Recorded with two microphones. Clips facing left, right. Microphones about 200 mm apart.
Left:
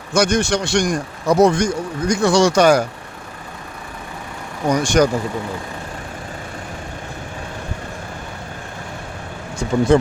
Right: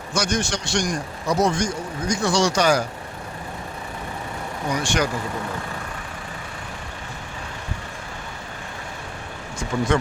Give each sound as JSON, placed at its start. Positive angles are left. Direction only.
{"t": 0.1, "sound": "a man's voice", "side_deg": 60}
{"t": 4.7, "sound": "speech", "side_deg": 45}
{"t": 9.6, "sound": "speech", "side_deg": 30}